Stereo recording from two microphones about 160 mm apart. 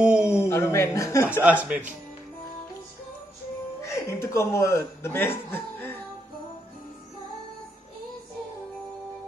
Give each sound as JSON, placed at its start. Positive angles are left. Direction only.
{"t": 0.0, "sound": "a sound", "side_deg": -5}
{"t": 0.5, "sound": "a man's voice", "side_deg": 15}
{"t": 1.4, "sound": "speech", "side_deg": -10}
{"t": 1.7, "sound": "speech", "side_deg": -55}
{"t": 3.8, "sound": "speech", "side_deg": 20}
{"t": 5.5, "sound": "a sound", "side_deg": 15}